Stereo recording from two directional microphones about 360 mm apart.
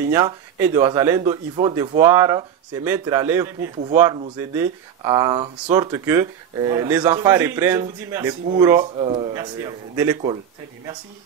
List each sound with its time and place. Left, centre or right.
0.0 s speech: centre